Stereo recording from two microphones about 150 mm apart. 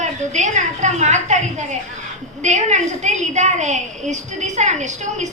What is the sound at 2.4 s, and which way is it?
A woman's voice, 50° right (ahead or behind).